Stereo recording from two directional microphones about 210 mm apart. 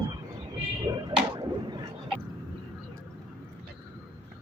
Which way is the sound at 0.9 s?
20° right (ahead or behind).